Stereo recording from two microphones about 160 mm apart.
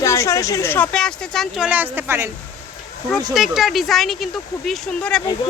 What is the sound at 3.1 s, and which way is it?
Speech, centre (ahead or behind).